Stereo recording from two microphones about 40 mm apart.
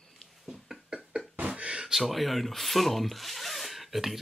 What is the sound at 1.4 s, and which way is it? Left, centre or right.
Beatboxing, right.